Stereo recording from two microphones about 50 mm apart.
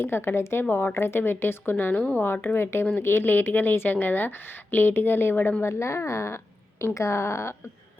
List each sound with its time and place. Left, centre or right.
0.0 s a woman's voice: left
1.8 s a woman's voice: left
5.6 s a woman's voice: left